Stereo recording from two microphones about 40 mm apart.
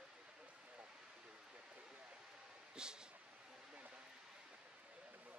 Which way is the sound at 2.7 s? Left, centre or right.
Centre.